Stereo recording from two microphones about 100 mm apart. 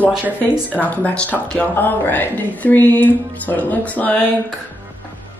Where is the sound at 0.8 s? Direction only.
15° left (ahead or behind).